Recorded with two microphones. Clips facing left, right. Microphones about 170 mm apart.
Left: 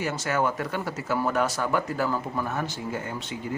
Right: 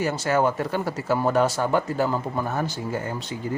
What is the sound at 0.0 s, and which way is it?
Speech, 35° right (ahead or behind).